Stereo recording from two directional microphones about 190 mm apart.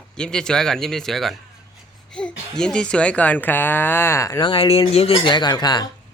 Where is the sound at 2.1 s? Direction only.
5° left (ahead or behind).